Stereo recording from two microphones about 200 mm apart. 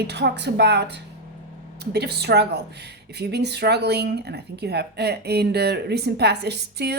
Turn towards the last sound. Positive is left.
turn(degrees=-55)  # may be behind; listen again after turning